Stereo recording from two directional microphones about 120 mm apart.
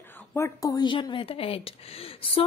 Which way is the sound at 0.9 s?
45° left (ahead or behind).